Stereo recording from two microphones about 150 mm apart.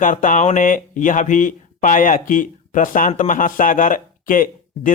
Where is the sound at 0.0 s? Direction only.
60° left (ahead or behind).